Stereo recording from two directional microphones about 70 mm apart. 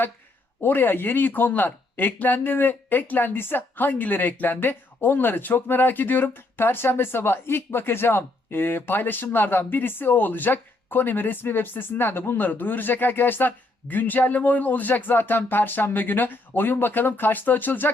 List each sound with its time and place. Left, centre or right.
0.6 s speech: left